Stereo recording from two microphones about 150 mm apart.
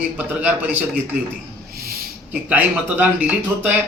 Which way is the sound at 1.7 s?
90° right.